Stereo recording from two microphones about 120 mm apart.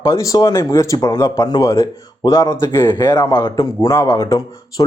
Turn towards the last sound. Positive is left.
turn(degrees=35)  # may be behind; listen again after turning